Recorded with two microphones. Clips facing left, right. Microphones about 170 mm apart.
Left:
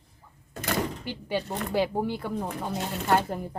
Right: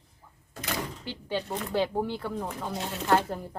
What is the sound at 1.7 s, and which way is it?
Speech, 10° left (ahead or behind).